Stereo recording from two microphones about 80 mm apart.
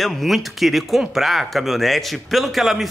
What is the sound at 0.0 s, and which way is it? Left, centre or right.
Speech, centre.